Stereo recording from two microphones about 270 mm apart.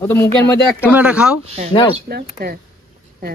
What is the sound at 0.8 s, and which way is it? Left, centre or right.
Speech, centre.